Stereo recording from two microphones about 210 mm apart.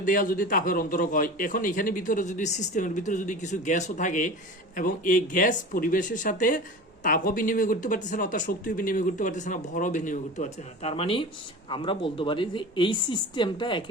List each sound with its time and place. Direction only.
0.0 s a man's voice: 40° left (ahead or behind); by 13.8 s 20° left (ahead or behind)